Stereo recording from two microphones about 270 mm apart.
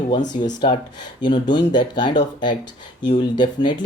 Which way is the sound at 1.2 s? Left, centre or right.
Centre.